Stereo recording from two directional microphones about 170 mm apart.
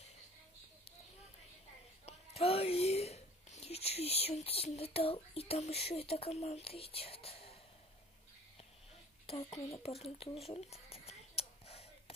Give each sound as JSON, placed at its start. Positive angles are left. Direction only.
{"t": 2.0, "sound": "whispering", "side_deg": 35}
{"t": 9.2, "sound": "a child's voice", "side_deg": 35}
{"t": 10.1, "sound": "a sound", "side_deg": 35}